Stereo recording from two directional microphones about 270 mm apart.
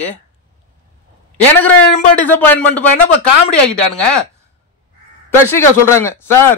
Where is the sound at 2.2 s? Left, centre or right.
Centre.